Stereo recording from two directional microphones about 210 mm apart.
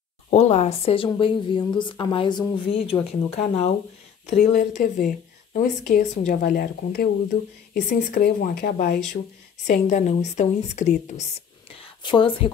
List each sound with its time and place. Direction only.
0.3 s a woman's voice: 30° left (ahead or behind); by 9.2 s 50° left (ahead or behind)
9.7 s a woman's voice: 35° left (ahead or behind)